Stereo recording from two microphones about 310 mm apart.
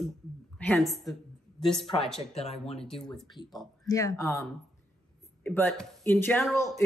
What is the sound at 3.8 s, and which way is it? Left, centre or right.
Speech, centre.